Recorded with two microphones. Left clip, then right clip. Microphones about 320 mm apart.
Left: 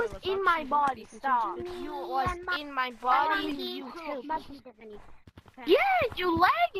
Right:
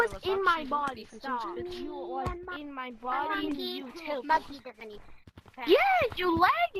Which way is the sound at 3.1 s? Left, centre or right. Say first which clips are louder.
Left 3 dB; centre.